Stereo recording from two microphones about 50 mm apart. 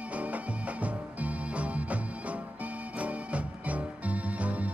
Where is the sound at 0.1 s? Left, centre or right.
Right.